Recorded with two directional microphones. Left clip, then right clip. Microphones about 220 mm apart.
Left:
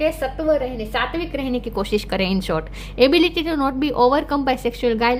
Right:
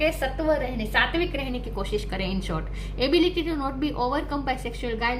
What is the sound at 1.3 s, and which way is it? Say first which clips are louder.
A woman's voice: left 7 dB; 50° left (ahead or behind).